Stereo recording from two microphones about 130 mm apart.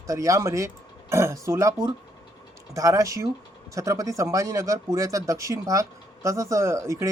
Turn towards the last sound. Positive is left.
turn(degrees=-20)  # may be behind; listen again after turning